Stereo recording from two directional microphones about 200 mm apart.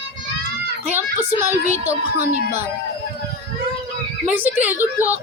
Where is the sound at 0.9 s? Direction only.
10° right (ahead or behind).